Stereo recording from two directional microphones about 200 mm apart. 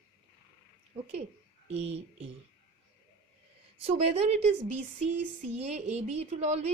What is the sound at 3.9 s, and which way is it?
A woman's voice, 30° right (ahead or behind).